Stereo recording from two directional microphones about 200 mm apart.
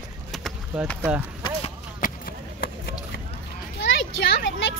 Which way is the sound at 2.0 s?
50° left (ahead or behind).